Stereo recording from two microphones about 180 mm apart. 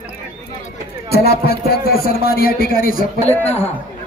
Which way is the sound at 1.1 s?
60° left (ahead or behind).